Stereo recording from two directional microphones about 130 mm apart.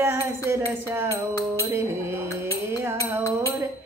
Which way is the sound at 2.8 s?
20° right (ahead or behind).